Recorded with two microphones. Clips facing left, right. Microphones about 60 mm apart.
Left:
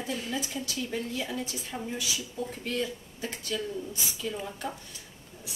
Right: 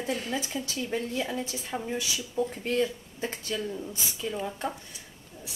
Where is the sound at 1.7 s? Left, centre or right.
Centre.